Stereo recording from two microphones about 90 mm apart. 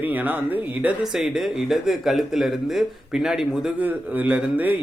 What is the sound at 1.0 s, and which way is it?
Speech, 5° right (ahead or behind).